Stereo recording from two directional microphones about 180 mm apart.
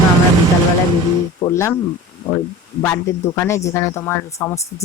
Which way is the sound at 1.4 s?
15° left (ahead or behind).